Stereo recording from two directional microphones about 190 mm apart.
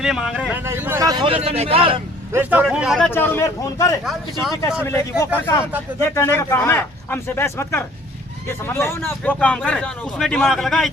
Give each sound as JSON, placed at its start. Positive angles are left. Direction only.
{"t": 0.0, "sound": "a man's voice", "side_deg": 0}
{"t": 2.3, "sound": "speech", "side_deg": -10}
{"t": 3.1, "sound": "speech", "side_deg": 10}